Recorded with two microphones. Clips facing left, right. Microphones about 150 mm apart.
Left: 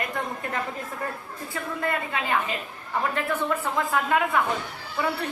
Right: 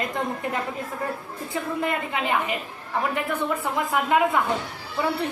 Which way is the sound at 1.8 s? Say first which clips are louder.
Left 1 dB; 20° right (ahead or behind).